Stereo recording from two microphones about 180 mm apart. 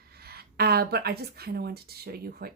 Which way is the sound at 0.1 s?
60° right (ahead or behind).